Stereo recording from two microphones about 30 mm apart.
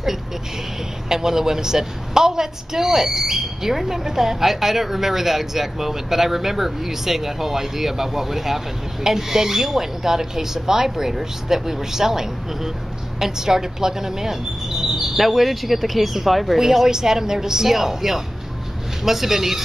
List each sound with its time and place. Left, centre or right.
1.0 s a woman's voice: centre
16.5 s a woman's voice: centre
17.6 s a woman's voice: centre